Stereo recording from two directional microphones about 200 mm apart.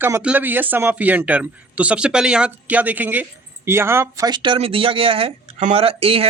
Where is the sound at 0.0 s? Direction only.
10° right (ahead or behind).